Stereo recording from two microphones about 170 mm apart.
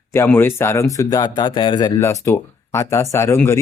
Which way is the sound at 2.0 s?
15° left (ahead or behind).